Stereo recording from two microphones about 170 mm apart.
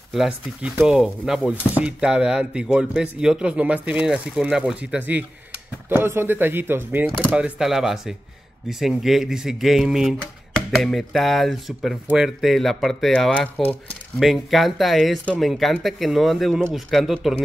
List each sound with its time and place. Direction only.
0.1 s speech: 5° right (ahead or behind)